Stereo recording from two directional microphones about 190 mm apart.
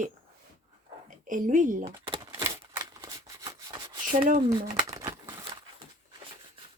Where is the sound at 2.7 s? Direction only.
15° right (ahead or behind).